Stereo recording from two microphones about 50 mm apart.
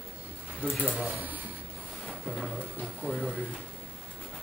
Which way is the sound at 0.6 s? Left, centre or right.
Right.